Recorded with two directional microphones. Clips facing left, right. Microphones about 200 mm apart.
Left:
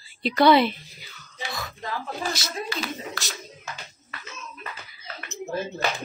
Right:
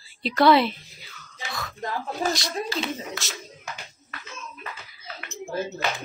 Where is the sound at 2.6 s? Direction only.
25° right (ahead or behind).